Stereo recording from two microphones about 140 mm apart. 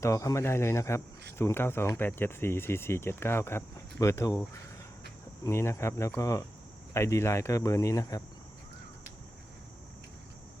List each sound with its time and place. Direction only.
0.0 s speech: 20° left (ahead or behind)